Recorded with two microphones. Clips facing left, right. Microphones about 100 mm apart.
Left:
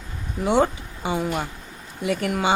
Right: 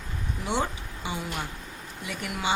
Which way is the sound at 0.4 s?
50° left (ahead or behind).